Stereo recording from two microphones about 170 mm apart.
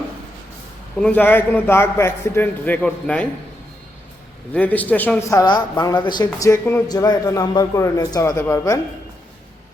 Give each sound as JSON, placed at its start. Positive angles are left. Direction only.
{"t": 0.9, "sound": "a man's voice", "side_deg": 5}
{"t": 4.5, "sound": "a man's voice", "side_deg": 10}
{"t": 5.4, "sound": "speech", "side_deg": 25}